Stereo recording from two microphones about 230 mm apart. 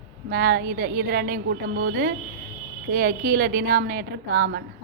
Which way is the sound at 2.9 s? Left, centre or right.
Right.